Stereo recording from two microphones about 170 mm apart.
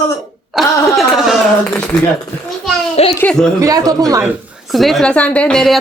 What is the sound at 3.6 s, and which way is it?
Speech, 20° right (ahead or behind).